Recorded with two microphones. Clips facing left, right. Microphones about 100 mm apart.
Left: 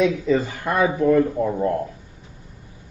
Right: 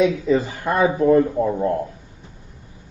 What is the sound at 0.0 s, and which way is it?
Speech, 15° right (ahead or behind).